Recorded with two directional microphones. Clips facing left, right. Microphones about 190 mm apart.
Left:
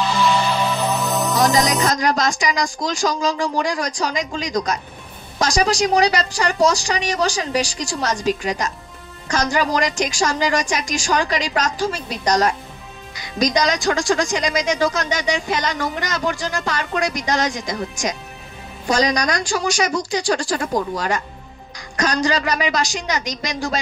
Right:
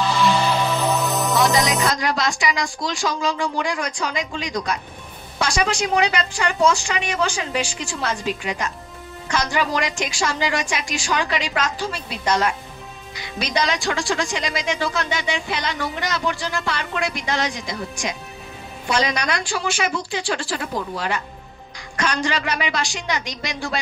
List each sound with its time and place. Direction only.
1.3 s speech: 45° left (ahead or behind)